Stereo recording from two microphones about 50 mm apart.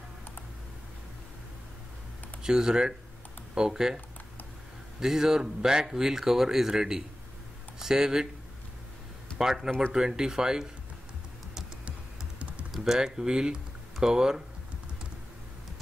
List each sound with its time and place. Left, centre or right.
2.4 s speech: centre
5.0 s speech: centre
9.4 s speech: centre
12.4 s typing: right
12.7 s speech: centre